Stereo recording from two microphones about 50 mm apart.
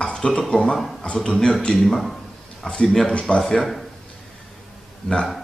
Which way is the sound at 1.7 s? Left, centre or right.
Centre.